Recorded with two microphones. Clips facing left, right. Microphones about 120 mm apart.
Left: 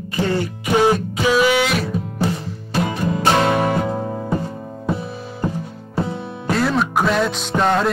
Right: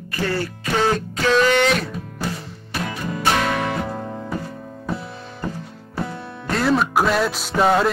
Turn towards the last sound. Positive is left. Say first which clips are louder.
# even
turn(degrees=-5)  # may be behind; listen again after turning